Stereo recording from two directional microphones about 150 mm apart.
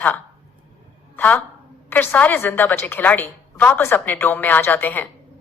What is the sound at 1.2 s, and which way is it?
A woman's voice, 10° left (ahead or behind).